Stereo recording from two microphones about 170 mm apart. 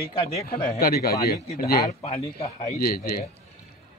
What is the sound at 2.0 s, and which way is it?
Speech, 40° left (ahead or behind).